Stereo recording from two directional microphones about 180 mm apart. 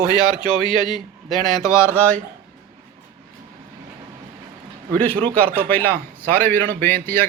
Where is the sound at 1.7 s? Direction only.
15° left (ahead or behind).